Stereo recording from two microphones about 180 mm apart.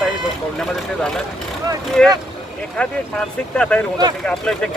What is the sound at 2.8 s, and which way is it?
Speech, 5° left (ahead or behind).